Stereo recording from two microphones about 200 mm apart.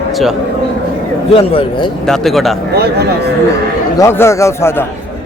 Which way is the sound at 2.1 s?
Centre (ahead or behind).